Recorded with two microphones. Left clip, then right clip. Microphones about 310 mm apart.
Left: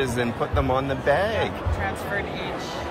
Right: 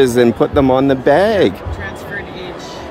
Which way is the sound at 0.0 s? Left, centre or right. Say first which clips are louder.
Right 14 dB; centre.